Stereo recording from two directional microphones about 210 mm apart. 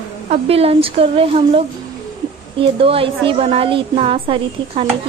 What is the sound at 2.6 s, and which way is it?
A woman's voice, 25° right (ahead or behind).